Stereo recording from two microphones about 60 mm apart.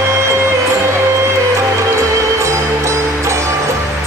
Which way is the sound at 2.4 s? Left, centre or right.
Right.